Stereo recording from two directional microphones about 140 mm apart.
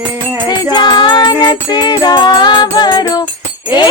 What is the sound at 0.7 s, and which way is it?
Music, 35° left (ahead or behind).